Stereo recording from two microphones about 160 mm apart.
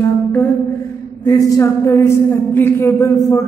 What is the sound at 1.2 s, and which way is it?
Speech, 25° left (ahead or behind).